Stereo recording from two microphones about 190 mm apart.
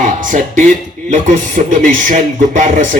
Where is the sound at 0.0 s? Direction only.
45° right (ahead or behind).